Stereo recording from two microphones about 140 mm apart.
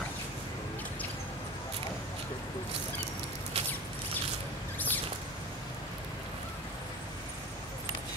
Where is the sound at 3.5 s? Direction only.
45° right (ahead or behind).